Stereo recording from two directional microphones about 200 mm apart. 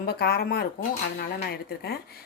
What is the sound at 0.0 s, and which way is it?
A woman's voice, 50° left (ahead or behind).